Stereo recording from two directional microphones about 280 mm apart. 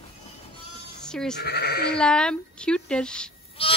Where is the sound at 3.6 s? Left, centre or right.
Centre.